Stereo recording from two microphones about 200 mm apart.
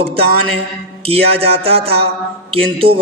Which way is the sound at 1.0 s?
30° right (ahead or behind).